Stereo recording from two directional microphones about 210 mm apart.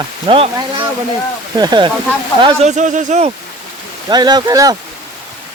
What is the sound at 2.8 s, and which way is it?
Speech, 35° right (ahead or behind).